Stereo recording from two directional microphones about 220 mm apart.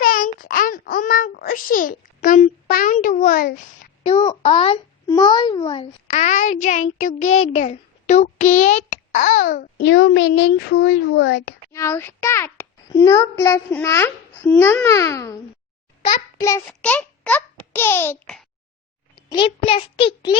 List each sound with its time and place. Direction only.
0.0 s a sound: 40° left (ahead or behind)
4.0 s a child's voice: 25° left (ahead or behind)
9.8 s speech: 55° left (ahead or behind)
11.7 s a child's voice: 10° left (ahead or behind)
16.4 s a child's voice: 10° left (ahead or behind)
19.1 s a child's voice: 20° left (ahead or behind)